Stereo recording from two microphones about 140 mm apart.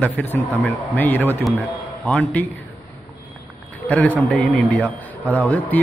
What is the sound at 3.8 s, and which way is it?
A man's voice, 10° left (ahead or behind).